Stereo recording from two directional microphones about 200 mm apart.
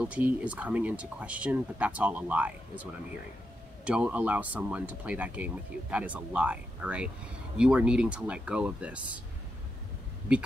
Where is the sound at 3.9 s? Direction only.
5° right (ahead or behind).